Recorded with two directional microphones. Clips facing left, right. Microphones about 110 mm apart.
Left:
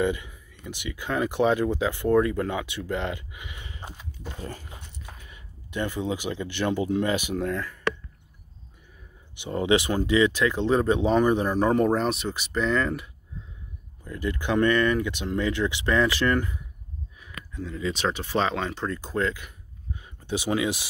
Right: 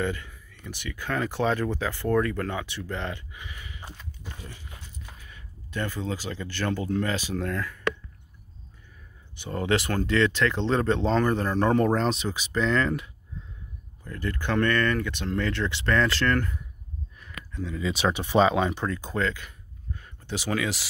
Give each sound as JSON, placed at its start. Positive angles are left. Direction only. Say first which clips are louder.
{"t": 0.0, "sound": "speech", "louder": "left 4 dB", "side_deg": 15}
{"t": 4.4, "sound": "speech", "louder": "left 8 dB", "side_deg": 45}
{"t": 4.6, "sound": "speech", "louder": "left 2 dB", "side_deg": 15}
{"t": 9.3, "sound": "speech", "louder": "left 3 dB", "side_deg": 15}
{"t": 17.2, "sound": "a sound", "louder": "right 1 dB", "side_deg": 5}
{"t": 18.0, "sound": "speech", "louder": "right 5 dB", "side_deg": -15}
{"t": 18.9, "sound": "speech", "louder": "left 1 dB", "side_deg": 5}